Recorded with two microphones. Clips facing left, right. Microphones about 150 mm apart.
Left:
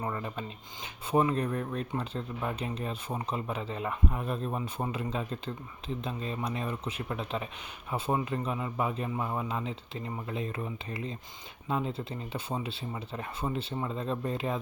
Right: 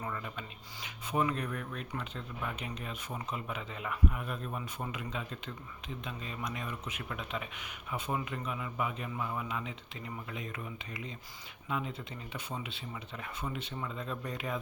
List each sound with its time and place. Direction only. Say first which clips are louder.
0.0 s speech: left 5 dB; 35° left (ahead or behind)